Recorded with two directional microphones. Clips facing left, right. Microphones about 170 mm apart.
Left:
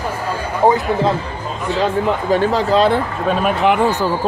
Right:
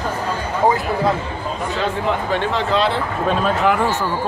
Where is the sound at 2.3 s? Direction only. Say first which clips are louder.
Left 5 dB; 40° left (ahead or behind).